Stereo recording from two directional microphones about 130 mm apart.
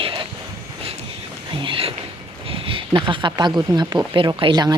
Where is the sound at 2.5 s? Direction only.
45° right (ahead or behind).